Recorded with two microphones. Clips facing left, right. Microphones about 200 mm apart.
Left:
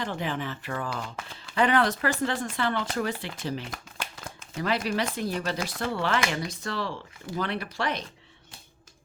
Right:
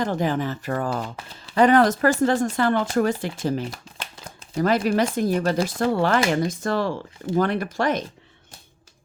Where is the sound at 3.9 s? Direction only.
30° right (ahead or behind).